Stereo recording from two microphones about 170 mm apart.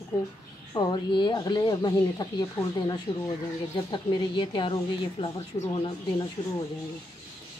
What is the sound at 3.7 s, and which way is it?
Speech, 30° left (ahead or behind).